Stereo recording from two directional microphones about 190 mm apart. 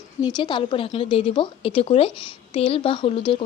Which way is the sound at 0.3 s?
25° left (ahead or behind).